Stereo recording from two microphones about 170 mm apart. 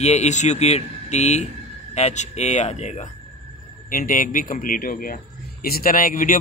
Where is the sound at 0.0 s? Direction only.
40° left (ahead or behind).